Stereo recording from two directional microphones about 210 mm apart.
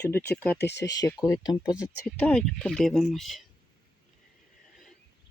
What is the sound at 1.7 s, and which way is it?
Speech, 5° right (ahead or behind).